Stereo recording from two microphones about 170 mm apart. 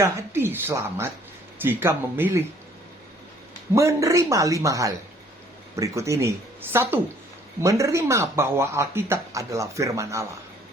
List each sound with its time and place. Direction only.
0.0 s speech: 15° right (ahead or behind)
3.8 s speech: 15° right (ahead or behind)